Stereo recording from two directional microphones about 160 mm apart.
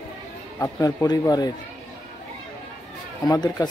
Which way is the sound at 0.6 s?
20° left (ahead or behind).